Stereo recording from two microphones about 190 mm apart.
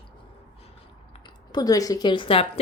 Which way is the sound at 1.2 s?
20° left (ahead or behind).